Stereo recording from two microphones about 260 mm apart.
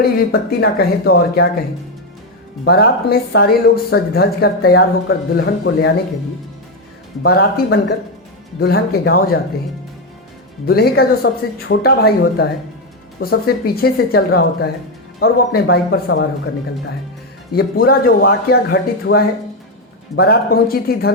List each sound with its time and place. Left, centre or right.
0.0 s speech: left
2.6 s speech: left
7.2 s speech: left
10.7 s speech: left
17.5 s speech: left